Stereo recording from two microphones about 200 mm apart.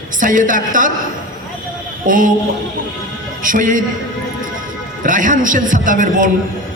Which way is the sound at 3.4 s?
40° right (ahead or behind).